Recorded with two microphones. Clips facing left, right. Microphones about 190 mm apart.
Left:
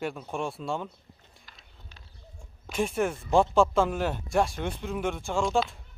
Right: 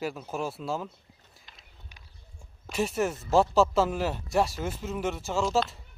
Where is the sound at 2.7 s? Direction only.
5° right (ahead or behind).